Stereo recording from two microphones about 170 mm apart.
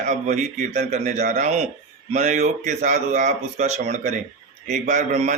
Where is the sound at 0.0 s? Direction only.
45° right (ahead or behind).